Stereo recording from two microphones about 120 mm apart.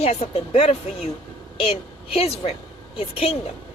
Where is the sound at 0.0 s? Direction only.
60° left (ahead or behind).